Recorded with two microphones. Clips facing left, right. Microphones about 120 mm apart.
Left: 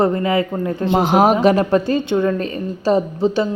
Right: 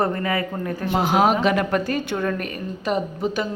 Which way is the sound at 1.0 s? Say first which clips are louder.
Left 4 dB; 45° left (ahead or behind).